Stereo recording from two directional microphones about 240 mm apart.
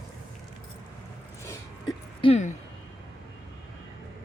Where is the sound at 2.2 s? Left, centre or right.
Left.